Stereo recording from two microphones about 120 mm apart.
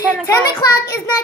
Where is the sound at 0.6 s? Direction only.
30° left (ahead or behind).